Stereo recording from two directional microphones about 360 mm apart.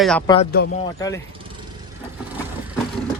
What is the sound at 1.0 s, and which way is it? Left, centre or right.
Speech, centre.